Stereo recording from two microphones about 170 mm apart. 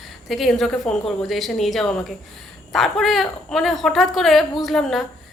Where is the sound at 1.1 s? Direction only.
Centre (ahead or behind).